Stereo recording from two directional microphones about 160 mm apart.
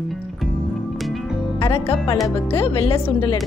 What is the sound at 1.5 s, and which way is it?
Music, 35° left (ahead or behind).